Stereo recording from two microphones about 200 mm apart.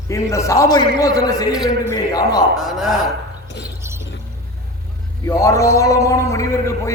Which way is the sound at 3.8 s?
15° right (ahead or behind).